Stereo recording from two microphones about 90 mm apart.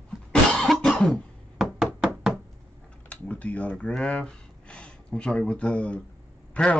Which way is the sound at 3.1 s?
15° left (ahead or behind).